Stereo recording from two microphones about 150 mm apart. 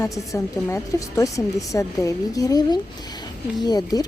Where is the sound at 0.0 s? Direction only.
20° left (ahead or behind).